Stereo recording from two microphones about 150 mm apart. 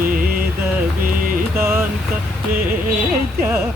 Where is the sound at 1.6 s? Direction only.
15° right (ahead or behind).